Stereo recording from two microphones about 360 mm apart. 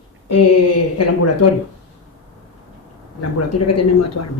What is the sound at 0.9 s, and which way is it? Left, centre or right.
Speech, left.